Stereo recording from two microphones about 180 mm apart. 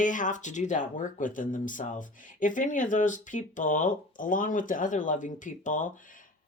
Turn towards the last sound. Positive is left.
turn(degrees=45)  # may be behind; listen again after turning